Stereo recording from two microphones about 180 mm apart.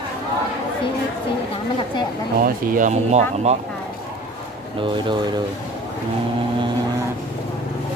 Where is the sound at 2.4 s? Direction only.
50° right (ahead or behind).